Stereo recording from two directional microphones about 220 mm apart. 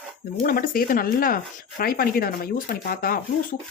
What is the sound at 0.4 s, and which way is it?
Speech, 40° left (ahead or behind).